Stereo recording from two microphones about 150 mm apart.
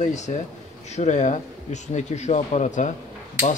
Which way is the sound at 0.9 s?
50° left (ahead or behind).